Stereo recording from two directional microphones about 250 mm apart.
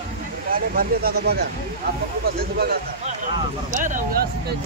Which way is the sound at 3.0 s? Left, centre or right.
Right.